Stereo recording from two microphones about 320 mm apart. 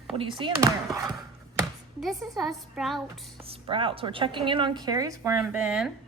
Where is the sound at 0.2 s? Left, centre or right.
Centre.